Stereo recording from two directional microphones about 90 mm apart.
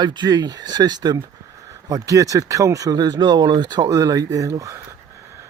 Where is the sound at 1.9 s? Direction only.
40° right (ahead or behind).